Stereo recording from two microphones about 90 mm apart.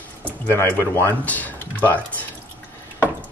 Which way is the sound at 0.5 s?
30° left (ahead or behind).